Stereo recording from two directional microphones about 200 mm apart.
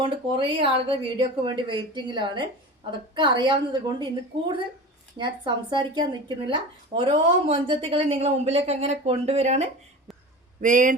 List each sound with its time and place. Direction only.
0.0 s speech: 25° right (ahead or behind); by 10.9 s 40° right (ahead or behind)